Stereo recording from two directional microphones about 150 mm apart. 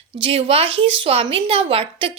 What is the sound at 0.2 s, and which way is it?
A woman's voice, 40° right (ahead or behind).